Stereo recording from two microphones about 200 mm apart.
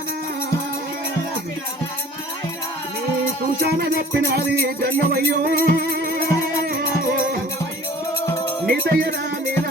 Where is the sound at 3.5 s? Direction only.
50° right (ahead or behind).